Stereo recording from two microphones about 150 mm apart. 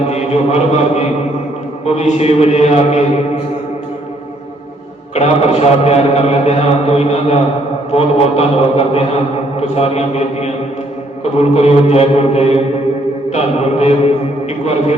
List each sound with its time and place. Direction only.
0.1 s a man's voice: 45° left (ahead or behind)
5.1 s a man's voice: 50° left (ahead or behind)